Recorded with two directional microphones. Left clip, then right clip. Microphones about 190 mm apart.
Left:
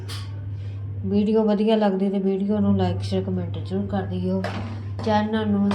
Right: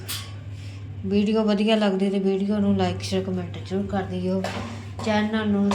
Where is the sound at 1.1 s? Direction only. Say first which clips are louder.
Left 2 dB; 15° left (ahead or behind).